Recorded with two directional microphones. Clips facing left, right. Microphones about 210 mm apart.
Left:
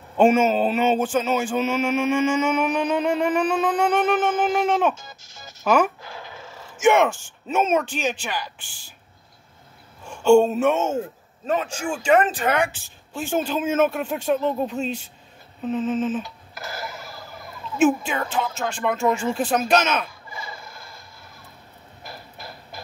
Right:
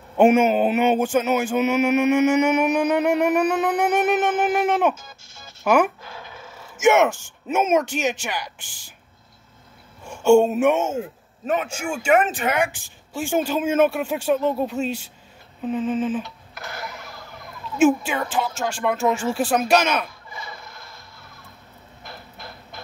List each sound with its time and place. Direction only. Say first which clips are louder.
0.2 s speech: right 1 dB; 15° right (ahead or behind)
2.0 s music: right 3 dB; 65° right (ahead or behind)
2.5 s speech: right 3 dB; 15° right (ahead or behind)
3.0 s music: right 2 dB; 70° right (ahead or behind)
3.5 s speech: even; 20° right (ahead or behind)
4.5 s speech: right 1 dB; 5° right (ahead or behind)
10.0 s speech: even; 10° right (ahead or behind)
16.5 s a sound: left 1 dB; centre (ahead or behind)
17.7 s speech: right 2 dB; 10° right (ahead or behind)
22.0 s a sound: left 1 dB; 5° left (ahead or behind)